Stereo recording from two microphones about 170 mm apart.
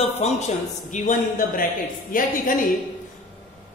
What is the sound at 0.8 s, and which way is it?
A man's voice, 50° left (ahead or behind).